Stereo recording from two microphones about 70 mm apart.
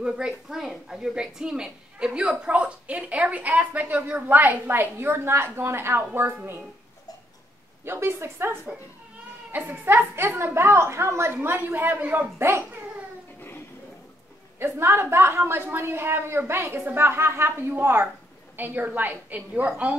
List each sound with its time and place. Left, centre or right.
0.0 s a woman's voice: centre; by 6.3 s right
7.8 s a woman's voice: right
11.4 s a woman's voice: right
14.6 s a woman's voice: right